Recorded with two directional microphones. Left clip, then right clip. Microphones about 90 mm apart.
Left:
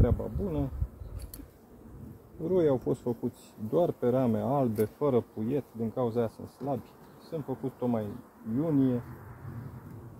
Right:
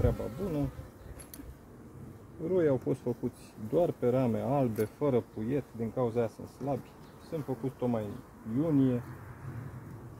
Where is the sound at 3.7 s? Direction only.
30° left (ahead or behind).